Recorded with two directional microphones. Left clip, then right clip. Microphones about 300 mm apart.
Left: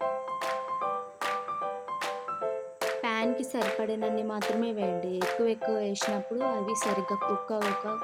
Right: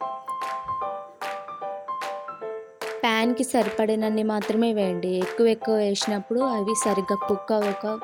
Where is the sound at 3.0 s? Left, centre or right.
Right.